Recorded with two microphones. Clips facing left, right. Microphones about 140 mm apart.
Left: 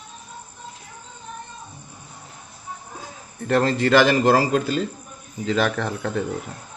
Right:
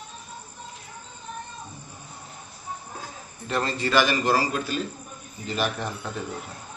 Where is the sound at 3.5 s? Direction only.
65° left (ahead or behind).